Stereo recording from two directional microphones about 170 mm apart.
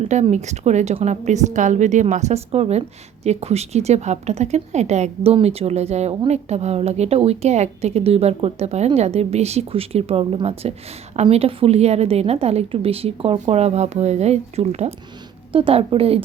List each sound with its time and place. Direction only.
0.1 s a woman's voice: 40° right (ahead or behind)